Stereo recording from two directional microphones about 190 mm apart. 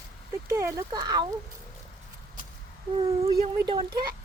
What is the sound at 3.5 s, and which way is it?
Speech, 25° right (ahead or behind).